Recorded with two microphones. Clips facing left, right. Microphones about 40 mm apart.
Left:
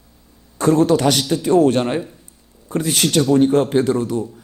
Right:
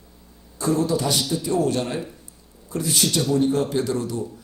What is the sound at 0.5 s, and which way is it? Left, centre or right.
A man's voice, left.